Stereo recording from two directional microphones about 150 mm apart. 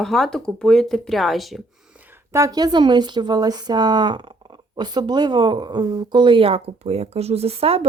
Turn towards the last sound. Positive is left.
turn(degrees=-40)  # may be behind; listen again after turning